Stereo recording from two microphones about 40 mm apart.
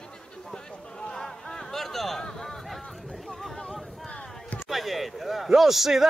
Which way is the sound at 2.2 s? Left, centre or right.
Centre.